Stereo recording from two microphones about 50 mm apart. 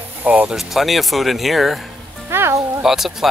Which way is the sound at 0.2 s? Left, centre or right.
Right.